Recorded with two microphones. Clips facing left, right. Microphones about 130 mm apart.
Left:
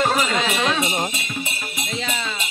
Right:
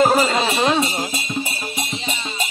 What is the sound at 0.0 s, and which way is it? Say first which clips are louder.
Music: right 5 dB; 35° right (ahead or behind).